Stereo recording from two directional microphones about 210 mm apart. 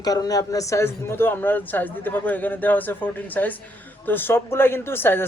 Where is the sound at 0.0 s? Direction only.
20° left (ahead or behind).